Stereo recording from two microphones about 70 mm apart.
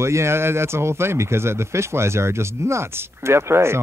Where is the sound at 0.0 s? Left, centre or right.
Right.